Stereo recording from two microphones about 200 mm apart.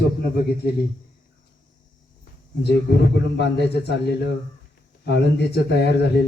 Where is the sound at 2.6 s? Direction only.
55° left (ahead or behind).